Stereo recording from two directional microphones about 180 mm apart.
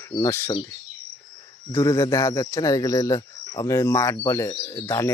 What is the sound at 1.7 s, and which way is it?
Speech, 15° left (ahead or behind).